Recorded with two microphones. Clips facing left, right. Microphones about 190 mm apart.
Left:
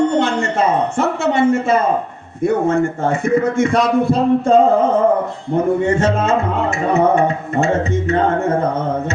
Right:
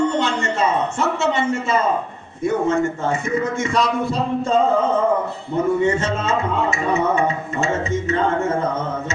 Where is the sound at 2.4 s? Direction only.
55° left (ahead or behind).